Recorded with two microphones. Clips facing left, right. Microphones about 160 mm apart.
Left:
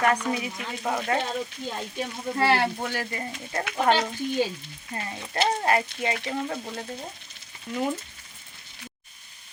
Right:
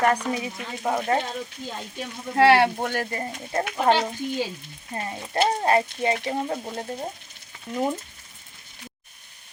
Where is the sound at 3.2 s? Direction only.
30° right (ahead or behind).